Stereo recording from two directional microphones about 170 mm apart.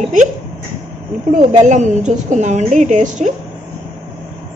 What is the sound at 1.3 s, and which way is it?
A woman's voice, 45° right (ahead or behind).